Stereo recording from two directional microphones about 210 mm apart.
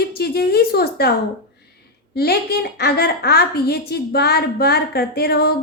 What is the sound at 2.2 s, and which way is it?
A woman's voice, 50° left (ahead or behind).